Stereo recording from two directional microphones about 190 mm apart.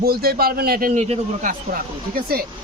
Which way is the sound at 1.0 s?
40° right (ahead or behind).